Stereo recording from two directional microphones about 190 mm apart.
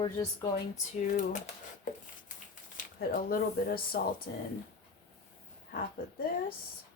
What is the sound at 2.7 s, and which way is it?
Speech, 50° left (ahead or behind).